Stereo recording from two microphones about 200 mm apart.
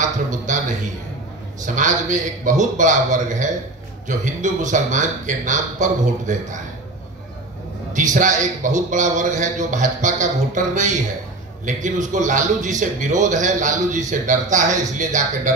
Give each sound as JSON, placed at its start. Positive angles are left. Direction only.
{"t": 0.0, "sound": "a sound", "side_deg": -40}
{"t": 1.8, "sound": "a man's voice", "side_deg": -40}
{"t": 7.9, "sound": "a man's voice", "side_deg": -40}